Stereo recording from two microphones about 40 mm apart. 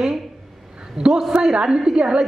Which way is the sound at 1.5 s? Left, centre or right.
Centre.